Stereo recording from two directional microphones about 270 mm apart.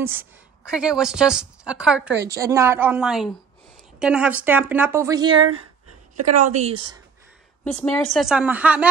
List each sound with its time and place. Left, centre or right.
0.0 s a woman's voice: centre
6.1 s a woman's voice: right
6.4 s speech: right
7.6 s a woman's voice: centre